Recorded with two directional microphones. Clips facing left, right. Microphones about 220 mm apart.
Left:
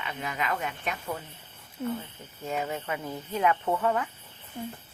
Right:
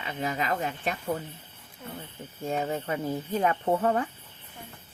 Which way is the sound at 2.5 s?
35° right (ahead or behind).